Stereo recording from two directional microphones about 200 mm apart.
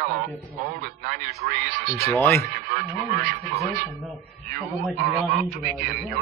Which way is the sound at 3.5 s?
35° right (ahead or behind).